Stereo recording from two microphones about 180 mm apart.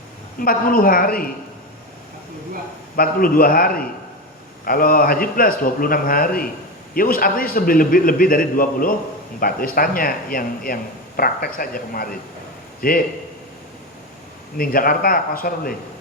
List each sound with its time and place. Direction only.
0.3 s a man's voice: 50° left (ahead or behind)
2.9 s a man's voice: 50° left (ahead or behind)
14.6 s a man's voice: 55° left (ahead or behind)